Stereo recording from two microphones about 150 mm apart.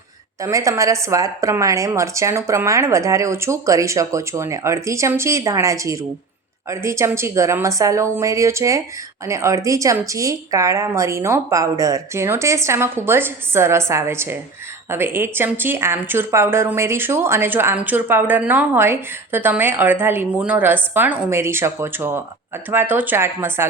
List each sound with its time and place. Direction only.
0.4 s a woman's voice: 20° right (ahead or behind)